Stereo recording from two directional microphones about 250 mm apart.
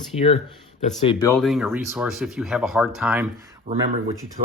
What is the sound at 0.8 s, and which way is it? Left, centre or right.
Speech, centre.